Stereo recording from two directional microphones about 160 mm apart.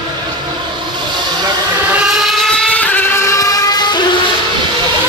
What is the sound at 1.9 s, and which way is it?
Vehicle, centre (ahead or behind).